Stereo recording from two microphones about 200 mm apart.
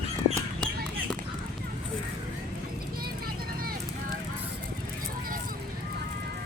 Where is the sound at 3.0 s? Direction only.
50° right (ahead or behind).